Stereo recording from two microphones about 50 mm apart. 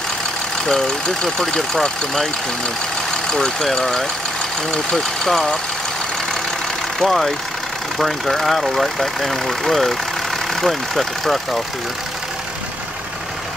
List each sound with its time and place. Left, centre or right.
0.7 s speech: centre
3.3 s speech: centre
7.0 s speech: centre